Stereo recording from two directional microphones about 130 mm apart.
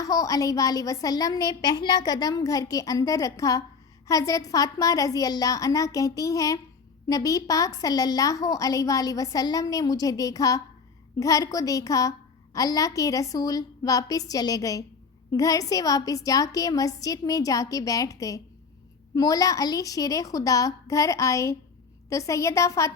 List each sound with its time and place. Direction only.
0.0 s a woman's voice: 25° left (ahead or behind)